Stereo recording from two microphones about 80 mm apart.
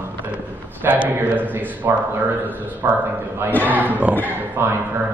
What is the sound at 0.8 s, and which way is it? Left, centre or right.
A man's voice, right.